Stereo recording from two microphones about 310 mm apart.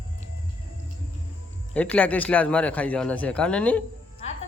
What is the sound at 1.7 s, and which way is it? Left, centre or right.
A man's voice, centre.